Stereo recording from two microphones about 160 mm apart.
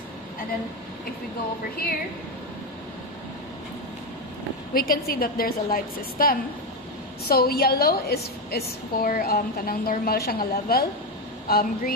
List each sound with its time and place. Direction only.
4.7 s a woman's voice: 65° left (ahead or behind)